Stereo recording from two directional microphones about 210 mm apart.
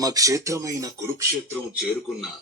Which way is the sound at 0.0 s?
15° right (ahead or behind).